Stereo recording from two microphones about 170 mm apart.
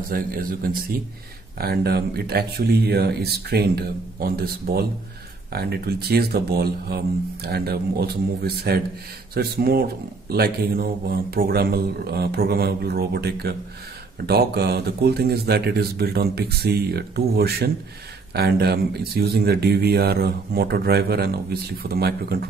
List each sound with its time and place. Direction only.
0.1 s a man's voice: 55° right (ahead or behind)
1.6 s a man's voice: 65° right (ahead or behind)